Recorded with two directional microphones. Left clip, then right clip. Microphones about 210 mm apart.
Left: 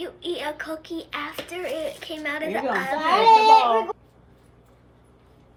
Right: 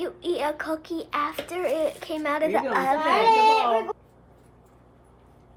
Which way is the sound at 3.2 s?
10° right (ahead or behind).